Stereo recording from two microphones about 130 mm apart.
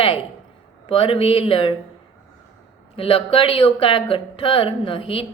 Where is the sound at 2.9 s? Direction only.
45° left (ahead or behind).